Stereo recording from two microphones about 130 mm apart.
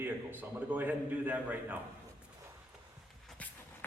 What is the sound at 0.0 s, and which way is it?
A man's voice, 15° right (ahead or behind).